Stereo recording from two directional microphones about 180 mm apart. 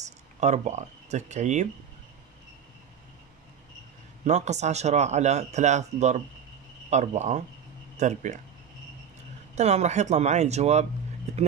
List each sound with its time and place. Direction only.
0.0 s speech: 40° right (ahead or behind)
4.2 s speech: 40° right (ahead or behind)
9.6 s speech: 40° right (ahead or behind)